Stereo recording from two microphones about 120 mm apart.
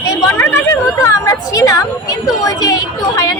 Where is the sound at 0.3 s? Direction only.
20° left (ahead or behind).